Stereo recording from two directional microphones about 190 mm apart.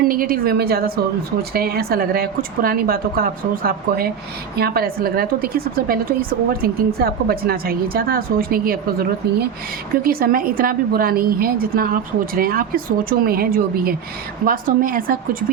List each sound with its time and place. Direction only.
0.0 s a woman's voice: 50° right (ahead or behind)